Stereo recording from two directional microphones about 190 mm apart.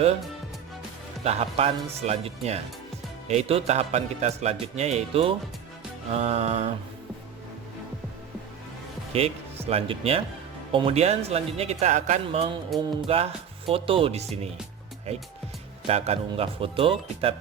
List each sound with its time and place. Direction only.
1.2 s a man's voice: 35° right (ahead or behind)
9.1 s a man's voice: 30° right (ahead or behind)
12.7 s music: centre (ahead or behind)
13.1 s a man's voice: 30° right (ahead or behind)